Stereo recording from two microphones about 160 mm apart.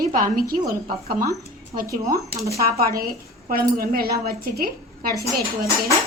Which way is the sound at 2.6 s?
70° right (ahead or behind).